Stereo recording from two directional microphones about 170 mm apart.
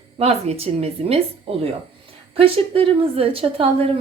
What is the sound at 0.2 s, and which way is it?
A woman's voice, 35° right (ahead or behind).